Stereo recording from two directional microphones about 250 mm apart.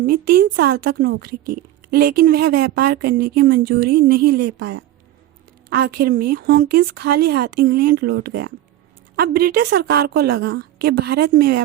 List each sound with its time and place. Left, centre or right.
0.0 s a woman's voice: right